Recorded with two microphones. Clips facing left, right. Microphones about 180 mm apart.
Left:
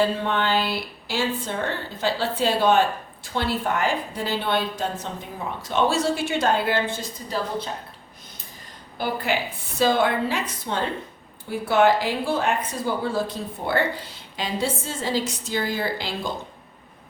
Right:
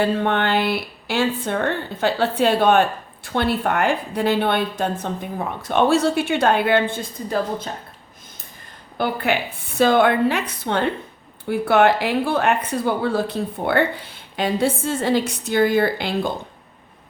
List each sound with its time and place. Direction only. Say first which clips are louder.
0.0 s a woman's voice: right 3 dB; 60° right (ahead or behind)
9.3 s a woman's voice: right 3 dB; 60° right (ahead or behind)